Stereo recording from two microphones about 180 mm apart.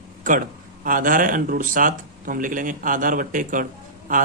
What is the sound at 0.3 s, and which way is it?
A man's voice, 50° right (ahead or behind).